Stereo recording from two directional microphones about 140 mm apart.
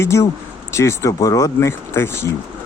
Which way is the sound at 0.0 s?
20° left (ahead or behind).